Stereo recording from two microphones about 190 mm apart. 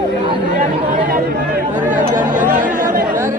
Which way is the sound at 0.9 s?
45° right (ahead or behind).